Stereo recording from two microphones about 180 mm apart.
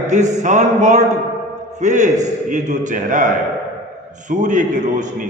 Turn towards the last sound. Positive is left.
turn(degrees=-45)  # may be behind; listen again after turning